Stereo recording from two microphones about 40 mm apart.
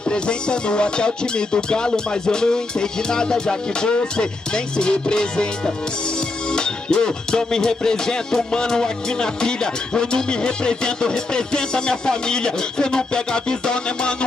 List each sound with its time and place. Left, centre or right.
0.1 s music: left
6.5 s music: centre